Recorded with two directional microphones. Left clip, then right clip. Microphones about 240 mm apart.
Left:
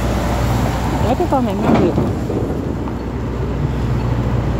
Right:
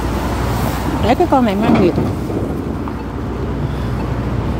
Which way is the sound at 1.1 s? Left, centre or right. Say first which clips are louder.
Right 5 dB; right.